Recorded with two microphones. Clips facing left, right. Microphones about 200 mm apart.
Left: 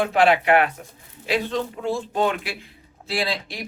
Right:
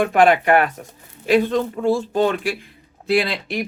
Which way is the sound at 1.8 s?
40° right (ahead or behind).